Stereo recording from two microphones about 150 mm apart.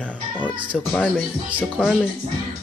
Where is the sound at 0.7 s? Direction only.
5° left (ahead or behind).